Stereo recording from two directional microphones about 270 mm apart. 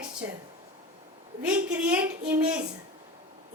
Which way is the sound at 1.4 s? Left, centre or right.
Centre.